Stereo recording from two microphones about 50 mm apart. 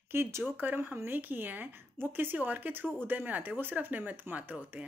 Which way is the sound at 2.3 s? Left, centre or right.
Right.